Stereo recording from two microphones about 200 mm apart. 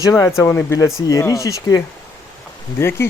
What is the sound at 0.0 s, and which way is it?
Speech, 15° left (ahead or behind).